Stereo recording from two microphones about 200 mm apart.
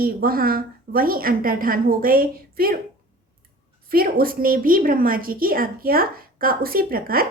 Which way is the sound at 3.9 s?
45° right (ahead or behind).